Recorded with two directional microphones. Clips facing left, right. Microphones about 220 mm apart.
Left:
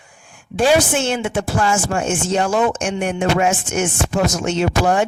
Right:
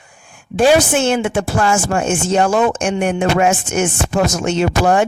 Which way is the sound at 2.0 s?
50° right (ahead or behind).